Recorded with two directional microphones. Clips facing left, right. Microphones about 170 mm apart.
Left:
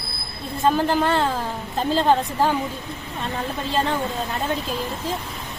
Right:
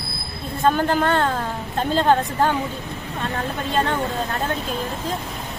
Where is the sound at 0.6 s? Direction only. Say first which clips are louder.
Right 1 dB; 5° left (ahead or behind).